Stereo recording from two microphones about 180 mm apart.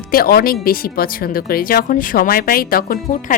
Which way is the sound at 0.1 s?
55° left (ahead or behind).